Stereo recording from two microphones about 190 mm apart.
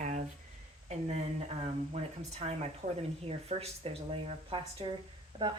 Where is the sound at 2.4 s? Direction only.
30° right (ahead or behind).